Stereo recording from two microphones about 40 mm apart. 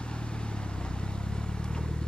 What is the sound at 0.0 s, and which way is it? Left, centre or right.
Vehicle, left.